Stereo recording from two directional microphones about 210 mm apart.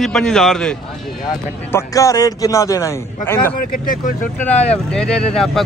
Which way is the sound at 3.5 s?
40° left (ahead or behind).